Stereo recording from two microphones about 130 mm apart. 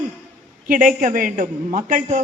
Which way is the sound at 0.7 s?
90° right.